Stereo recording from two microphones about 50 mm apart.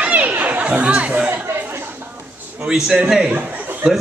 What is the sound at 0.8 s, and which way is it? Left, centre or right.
Speech, right.